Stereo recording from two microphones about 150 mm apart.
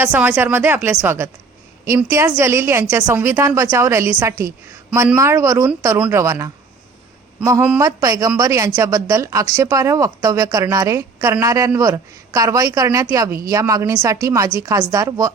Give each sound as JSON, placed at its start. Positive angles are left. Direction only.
{"t": 0.0, "sound": "a woman's voice", "side_deg": -10}